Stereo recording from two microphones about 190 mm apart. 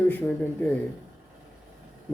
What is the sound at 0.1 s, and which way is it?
Speech, 5° left (ahead or behind).